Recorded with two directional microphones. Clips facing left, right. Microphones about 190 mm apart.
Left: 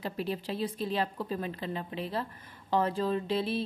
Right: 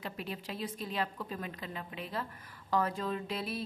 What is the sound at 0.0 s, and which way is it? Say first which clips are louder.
A woman's voice: left 7 dB; 30° left (ahead or behind).